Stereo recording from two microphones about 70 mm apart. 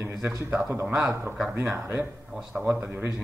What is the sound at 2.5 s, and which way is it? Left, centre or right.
Speech, right.